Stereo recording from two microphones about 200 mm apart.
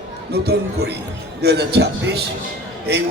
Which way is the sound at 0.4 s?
55° right (ahead or behind).